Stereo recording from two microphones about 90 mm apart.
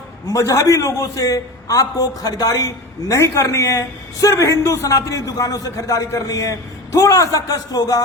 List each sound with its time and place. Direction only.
0.3 s a man's voice: 35° left (ahead or behind)